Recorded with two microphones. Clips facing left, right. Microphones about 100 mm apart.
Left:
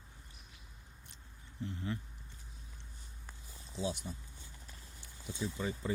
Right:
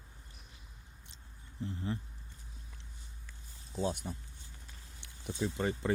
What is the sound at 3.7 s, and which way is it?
Speech, 50° right (ahead or behind).